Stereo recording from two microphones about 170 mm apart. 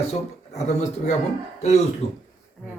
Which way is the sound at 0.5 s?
45° left (ahead or behind).